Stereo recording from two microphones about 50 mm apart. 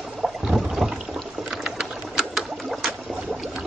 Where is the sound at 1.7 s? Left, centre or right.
Centre.